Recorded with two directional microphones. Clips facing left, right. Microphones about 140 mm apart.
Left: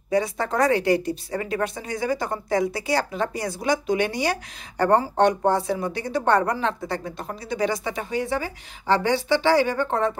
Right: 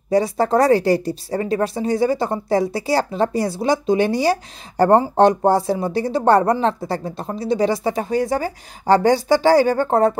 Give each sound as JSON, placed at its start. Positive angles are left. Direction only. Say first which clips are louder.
{"t": 0.1, "sound": "a woman's voice", "louder": "right 6 dB", "side_deg": -35}